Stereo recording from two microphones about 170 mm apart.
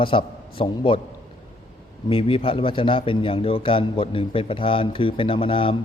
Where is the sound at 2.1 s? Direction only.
30° left (ahead or behind).